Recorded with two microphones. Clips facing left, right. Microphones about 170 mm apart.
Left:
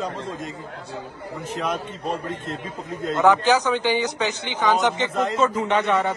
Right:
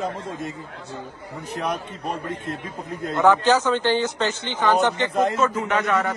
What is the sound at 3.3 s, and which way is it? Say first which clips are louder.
A man's voice: right 1 dB; 15° left (ahead or behind).